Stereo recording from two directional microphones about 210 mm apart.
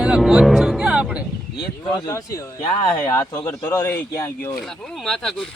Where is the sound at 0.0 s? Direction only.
5° right (ahead or behind).